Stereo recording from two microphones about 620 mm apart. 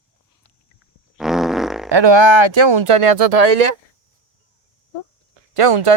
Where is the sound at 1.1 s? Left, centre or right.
Centre.